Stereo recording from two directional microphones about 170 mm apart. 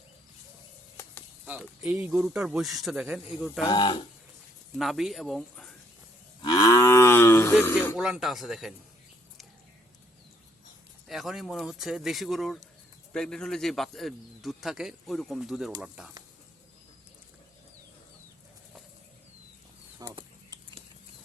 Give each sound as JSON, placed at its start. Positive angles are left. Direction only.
{"t": 1.8, "sound": "a man's voice", "side_deg": -15}
{"t": 3.6, "sound": "speech", "side_deg": 25}
{"t": 4.8, "sound": "a man's voice", "side_deg": 0}
{"t": 6.4, "sound": "cattle", "side_deg": 20}
{"t": 7.9, "sound": "a man's voice", "side_deg": -5}
{"t": 11.1, "sound": "a man's voice", "side_deg": 0}
{"t": 20.0, "sound": "a sound", "side_deg": -20}